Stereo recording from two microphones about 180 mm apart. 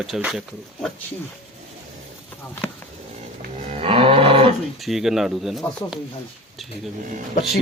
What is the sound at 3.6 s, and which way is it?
Roaring cats, 35° right (ahead or behind).